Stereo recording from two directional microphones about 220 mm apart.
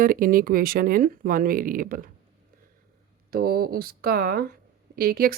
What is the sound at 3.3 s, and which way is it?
Speech, 45° right (ahead or behind).